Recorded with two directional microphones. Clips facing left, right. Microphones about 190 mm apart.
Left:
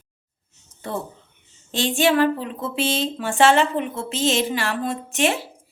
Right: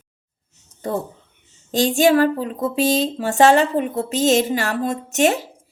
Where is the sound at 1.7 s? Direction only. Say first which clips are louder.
Right 4 dB; 40° right (ahead or behind).